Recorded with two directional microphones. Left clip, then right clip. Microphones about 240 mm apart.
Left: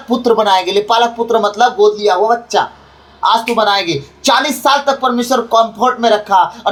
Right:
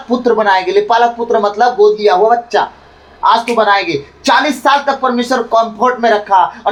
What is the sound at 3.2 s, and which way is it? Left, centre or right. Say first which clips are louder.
Speech: right 2 dB; left.